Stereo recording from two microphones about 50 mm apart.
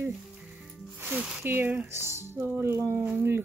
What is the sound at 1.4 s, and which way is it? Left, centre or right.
Speech, right.